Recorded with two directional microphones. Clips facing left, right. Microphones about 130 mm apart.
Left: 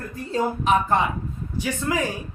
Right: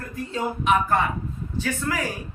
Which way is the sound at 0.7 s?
35° left (ahead or behind).